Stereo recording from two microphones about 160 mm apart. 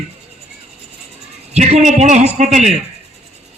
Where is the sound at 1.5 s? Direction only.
45° right (ahead or behind).